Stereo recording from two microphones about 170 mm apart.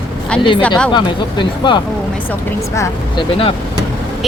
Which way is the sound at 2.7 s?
15° left (ahead or behind).